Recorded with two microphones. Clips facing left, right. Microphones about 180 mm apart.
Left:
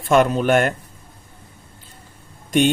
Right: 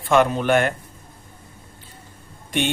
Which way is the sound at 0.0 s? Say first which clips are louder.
Left 2 dB; 45° left (ahead or behind).